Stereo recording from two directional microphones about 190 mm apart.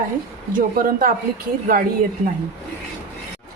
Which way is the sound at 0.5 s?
45° right (ahead or behind).